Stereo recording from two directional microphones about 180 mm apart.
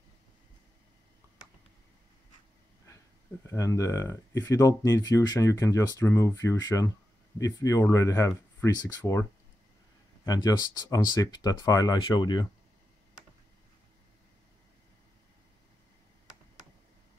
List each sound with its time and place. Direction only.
3.4 s speech: 15° left (ahead or behind)
10.2 s speech: 20° left (ahead or behind)